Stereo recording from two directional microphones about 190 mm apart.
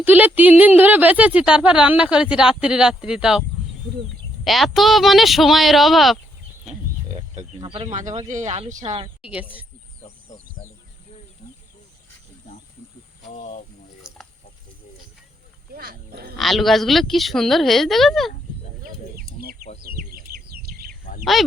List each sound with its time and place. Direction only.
0.0 s a woman's voice: 10° right (ahead or behind)
4.4 s a woman's voice: centre (ahead or behind)
7.2 s speech: 35° right (ahead or behind)
9.2 s a woman's voice: 5° right (ahead or behind)
13.3 s speech: 40° left (ahead or behind)
15.7 s wild animals: 50° right (ahead or behind)
16.4 s a woman's voice: centre (ahead or behind)
20.3 s bird: 50° right (ahead or behind)
21.3 s a woman's voice: centre (ahead or behind)